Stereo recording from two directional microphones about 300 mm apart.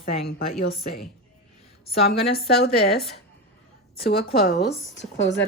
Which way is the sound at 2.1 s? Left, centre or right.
Left.